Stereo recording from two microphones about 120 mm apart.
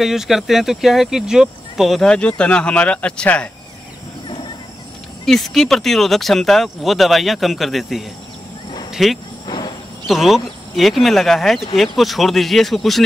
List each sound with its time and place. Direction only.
0.0 s speech: 5° right (ahead or behind)
5.2 s speech: centre (ahead or behind)
9.5 s a sound: 35° left (ahead or behind)
10.0 s speech: centre (ahead or behind)